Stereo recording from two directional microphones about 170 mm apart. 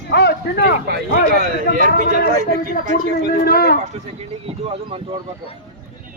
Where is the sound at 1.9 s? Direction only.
65° left (ahead or behind).